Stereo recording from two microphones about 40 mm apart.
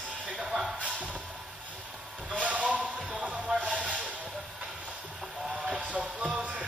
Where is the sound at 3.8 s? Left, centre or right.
Right.